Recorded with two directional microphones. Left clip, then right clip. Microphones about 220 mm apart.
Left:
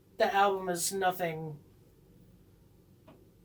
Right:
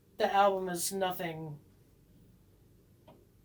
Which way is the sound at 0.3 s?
20° right (ahead or behind).